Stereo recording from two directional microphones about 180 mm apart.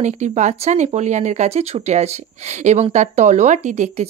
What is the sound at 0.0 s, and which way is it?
Speech, 40° right (ahead or behind).